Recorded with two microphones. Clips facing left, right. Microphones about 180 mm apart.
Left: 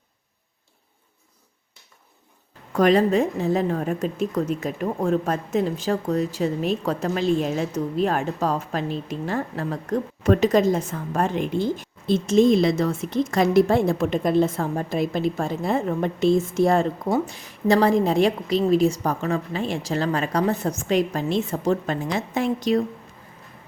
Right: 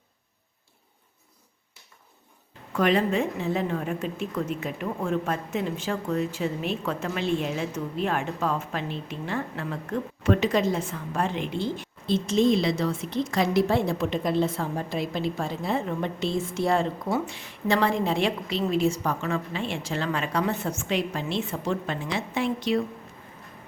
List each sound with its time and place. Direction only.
2.7 s a woman's voice: 40° left (ahead or behind)